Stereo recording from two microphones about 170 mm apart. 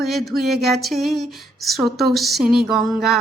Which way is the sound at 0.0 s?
Centre (ahead or behind).